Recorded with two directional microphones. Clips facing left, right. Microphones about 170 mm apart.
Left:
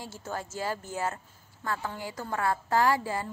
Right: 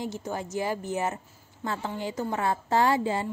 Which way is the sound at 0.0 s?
15° right (ahead or behind).